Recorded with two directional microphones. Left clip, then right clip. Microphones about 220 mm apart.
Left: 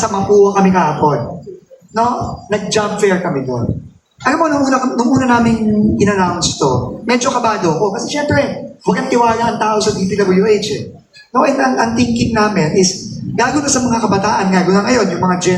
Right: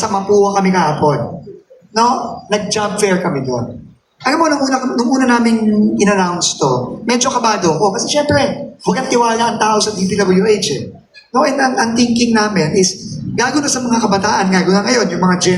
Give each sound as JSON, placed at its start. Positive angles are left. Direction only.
{"t": 0.0, "sound": "a man's voice", "side_deg": -35}
{"t": 2.5, "sound": "a man's voice", "side_deg": -40}
{"t": 4.2, "sound": "a man's voice", "side_deg": -40}